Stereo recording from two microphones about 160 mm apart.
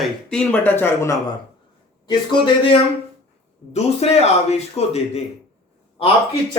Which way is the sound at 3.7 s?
40° left (ahead or behind).